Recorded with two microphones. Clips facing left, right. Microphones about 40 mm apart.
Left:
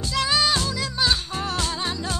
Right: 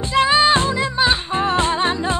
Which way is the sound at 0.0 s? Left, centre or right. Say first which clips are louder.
Right 7 dB; right.